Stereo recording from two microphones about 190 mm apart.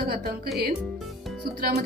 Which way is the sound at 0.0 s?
55° right (ahead or behind).